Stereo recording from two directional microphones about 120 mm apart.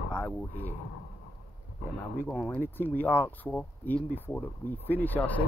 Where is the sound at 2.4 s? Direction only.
15° left (ahead or behind).